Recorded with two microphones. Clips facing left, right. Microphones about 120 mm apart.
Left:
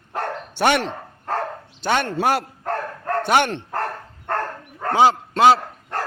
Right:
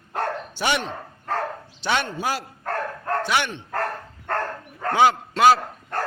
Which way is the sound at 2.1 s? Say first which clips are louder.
Left 7 dB; 60° left (ahead or behind).